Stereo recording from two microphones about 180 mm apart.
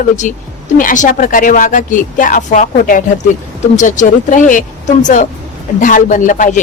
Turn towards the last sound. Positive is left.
turn(degrees=45)  # may be behind; listen again after turning